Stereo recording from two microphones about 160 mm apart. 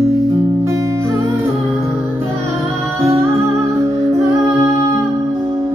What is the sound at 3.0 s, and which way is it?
Music, 20° right (ahead or behind).